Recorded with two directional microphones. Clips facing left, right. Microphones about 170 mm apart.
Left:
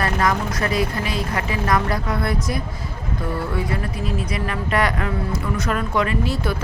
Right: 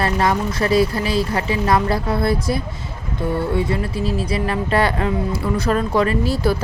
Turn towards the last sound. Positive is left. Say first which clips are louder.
# right 4 dB
turn(degrees=-35)  # may be behind; listen again after turning